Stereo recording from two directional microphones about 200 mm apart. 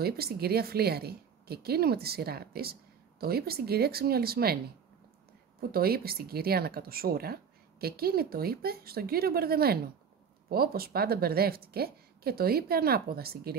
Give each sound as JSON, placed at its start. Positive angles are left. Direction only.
{"t": 0.0, "sound": "a woman's voice", "side_deg": -50}
{"t": 5.6, "sound": "a woman's voice", "side_deg": -50}